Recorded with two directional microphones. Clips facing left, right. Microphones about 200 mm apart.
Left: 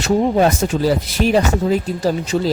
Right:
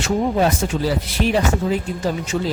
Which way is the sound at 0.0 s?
45° left (ahead or behind).